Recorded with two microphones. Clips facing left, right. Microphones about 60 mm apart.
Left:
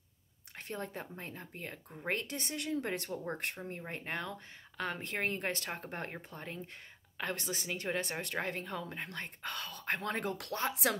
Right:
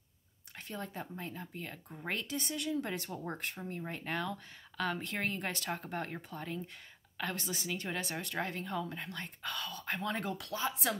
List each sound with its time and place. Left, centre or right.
0.6 s a woman's voice: left
3.9 s a woman's voice: left